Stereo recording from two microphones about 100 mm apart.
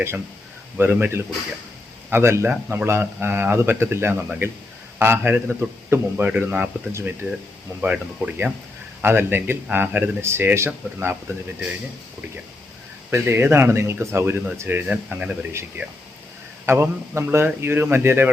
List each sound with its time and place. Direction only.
0.8 s a man's voice: 20° right (ahead or behind)
13.2 s a man's voice: 25° right (ahead or behind)
15.8 s a man's voice: 25° right (ahead or behind)